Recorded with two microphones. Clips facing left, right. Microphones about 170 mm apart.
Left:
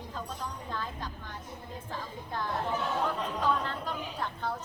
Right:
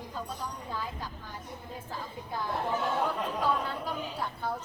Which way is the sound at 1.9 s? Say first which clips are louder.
Even; 10° right (ahead or behind).